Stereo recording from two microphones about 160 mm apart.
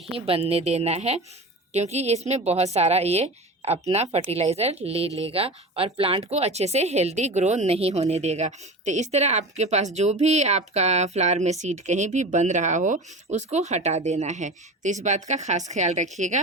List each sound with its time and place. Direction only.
0.1 s a woman's voice: 35° right (ahead or behind)